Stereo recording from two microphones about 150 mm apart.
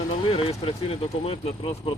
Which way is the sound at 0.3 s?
40° left (ahead or behind).